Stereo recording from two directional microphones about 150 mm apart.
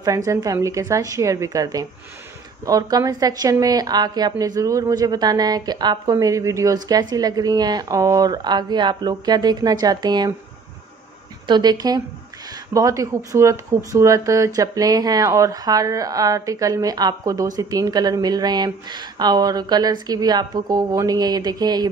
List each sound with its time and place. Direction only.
0.0 s a woman's voice: 25° right (ahead or behind)
11.4 s a woman's voice: 30° right (ahead or behind)